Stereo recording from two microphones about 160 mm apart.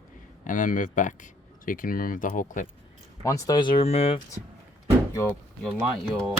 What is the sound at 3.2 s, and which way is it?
Speech, 20° left (ahead or behind).